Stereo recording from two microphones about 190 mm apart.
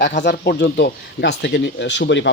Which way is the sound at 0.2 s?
60° left (ahead or behind).